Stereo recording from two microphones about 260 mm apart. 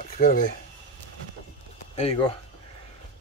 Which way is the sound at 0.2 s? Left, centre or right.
Left.